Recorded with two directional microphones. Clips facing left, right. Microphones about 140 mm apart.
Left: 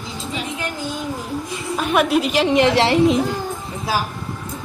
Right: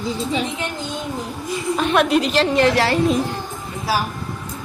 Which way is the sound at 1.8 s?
5° left (ahead or behind).